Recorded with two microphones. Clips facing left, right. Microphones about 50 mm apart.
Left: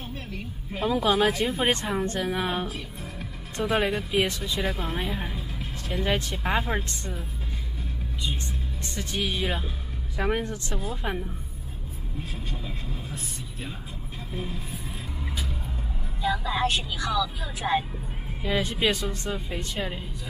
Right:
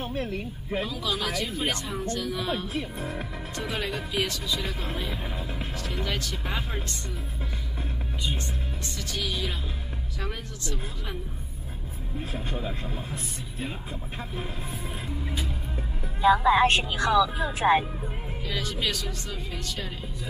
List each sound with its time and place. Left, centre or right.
0.0 s speech: right
0.8 s speech: left
2.7 s speech: right
3.5 s speech: left
8.9 s speech: left
12.4 s speech: right
16.2 s speech: right
16.6 s speech: right
17.1 s speech: right
18.4 s speech: left